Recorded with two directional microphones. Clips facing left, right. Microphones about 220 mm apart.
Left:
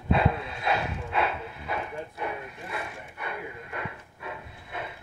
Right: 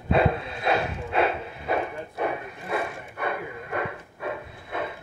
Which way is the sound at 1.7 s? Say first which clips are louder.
Right 7 dB; 65° right (ahead or behind).